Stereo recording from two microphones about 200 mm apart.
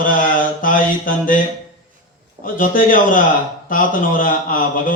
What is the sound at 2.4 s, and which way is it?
Speech, 45° left (ahead or behind).